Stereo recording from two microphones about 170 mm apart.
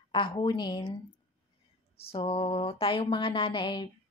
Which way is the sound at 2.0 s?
35° left (ahead or behind).